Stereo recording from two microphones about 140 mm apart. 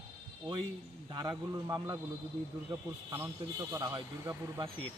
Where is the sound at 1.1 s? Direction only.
30° right (ahead or behind).